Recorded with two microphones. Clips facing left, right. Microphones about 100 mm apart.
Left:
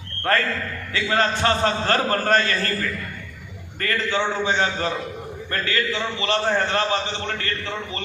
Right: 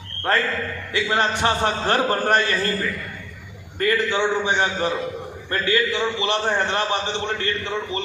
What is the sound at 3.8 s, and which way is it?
A man's voice, 15° right (ahead or behind).